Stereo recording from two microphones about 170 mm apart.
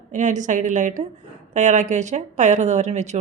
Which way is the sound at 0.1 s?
45° right (ahead or behind).